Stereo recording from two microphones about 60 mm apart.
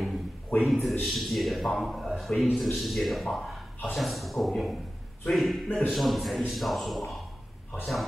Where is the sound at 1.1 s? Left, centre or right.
Centre.